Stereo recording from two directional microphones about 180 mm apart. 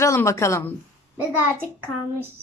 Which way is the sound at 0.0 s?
15° left (ahead or behind).